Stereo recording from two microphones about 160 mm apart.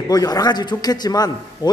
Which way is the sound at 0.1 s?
25° left (ahead or behind).